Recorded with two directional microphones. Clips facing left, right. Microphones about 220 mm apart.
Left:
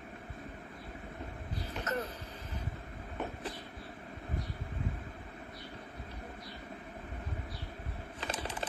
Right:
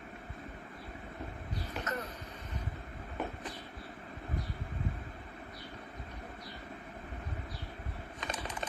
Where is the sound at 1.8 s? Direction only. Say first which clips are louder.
Left 4 dB; 30° left (ahead or behind).